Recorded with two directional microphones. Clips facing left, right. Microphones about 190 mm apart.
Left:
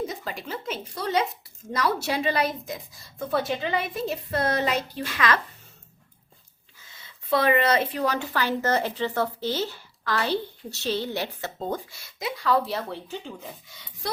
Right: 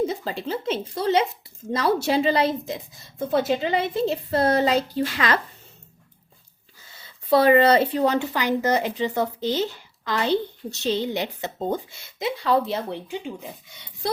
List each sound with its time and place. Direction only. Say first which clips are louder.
0.1 s a woman's voice: right 6 dB; 30° right (ahead or behind)
7.3 s a woman's voice: right 6 dB; 35° right (ahead or behind); by 13.3 s 15° right (ahead or behind)